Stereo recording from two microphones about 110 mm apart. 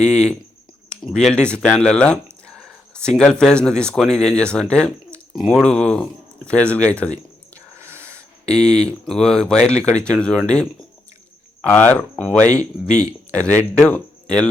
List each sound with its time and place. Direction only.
0.0 s speech: 5° left (ahead or behind)
2.5 s a sound: 5° left (ahead or behind)
3.4 s speech: 5° left (ahead or behind)
7.8 s wheeze: 20° right (ahead or behind)
8.0 s a sound: 10° left (ahead or behind)
9.0 s speech: 5° left (ahead or behind)